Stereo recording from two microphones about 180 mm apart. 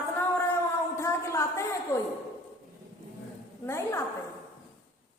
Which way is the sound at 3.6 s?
15° left (ahead or behind).